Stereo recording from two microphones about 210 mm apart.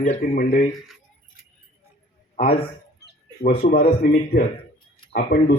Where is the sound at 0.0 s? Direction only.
40° left (ahead or behind).